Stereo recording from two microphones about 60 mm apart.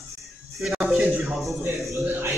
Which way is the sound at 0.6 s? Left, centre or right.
Centre.